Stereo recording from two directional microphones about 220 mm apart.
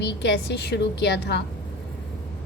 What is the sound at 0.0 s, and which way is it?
A woman's voice, 50° left (ahead or behind).